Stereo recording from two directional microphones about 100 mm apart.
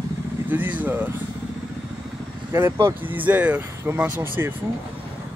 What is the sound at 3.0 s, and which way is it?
Speech, 20° right (ahead or behind).